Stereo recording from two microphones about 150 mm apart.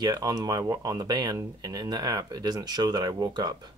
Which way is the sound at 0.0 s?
25° right (ahead or behind).